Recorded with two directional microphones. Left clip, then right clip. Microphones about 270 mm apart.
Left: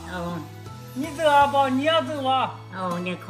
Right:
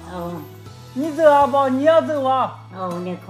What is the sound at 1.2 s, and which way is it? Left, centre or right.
Speech, right.